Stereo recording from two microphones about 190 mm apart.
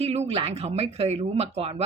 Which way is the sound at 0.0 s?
35° right (ahead or behind).